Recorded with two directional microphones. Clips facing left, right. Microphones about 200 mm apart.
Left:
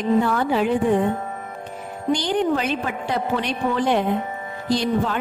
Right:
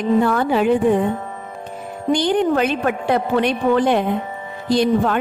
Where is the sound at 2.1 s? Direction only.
55° right (ahead or behind).